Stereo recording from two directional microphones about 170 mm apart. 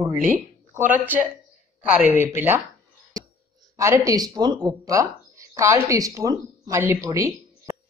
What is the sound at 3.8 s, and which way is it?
Speech, 20° right (ahead or behind).